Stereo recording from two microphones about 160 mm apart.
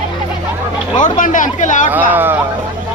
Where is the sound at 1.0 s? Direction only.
55° left (ahead or behind).